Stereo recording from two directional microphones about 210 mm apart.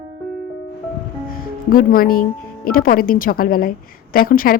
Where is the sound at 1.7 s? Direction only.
45° left (ahead or behind).